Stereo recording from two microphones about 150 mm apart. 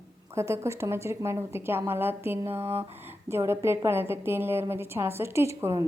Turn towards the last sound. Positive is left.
turn(degrees=-20)  # may be behind; listen again after turning